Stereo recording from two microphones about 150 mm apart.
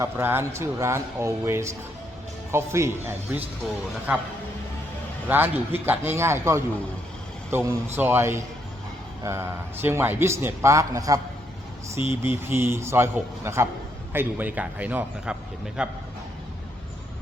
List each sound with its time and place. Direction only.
0.0 s a man's voice: 15° right (ahead or behind)
5.3 s a man's voice: 15° right (ahead or behind)
12.0 s speech: 30° left (ahead or behind)
12.5 s a man's voice: 15° right (ahead or behind)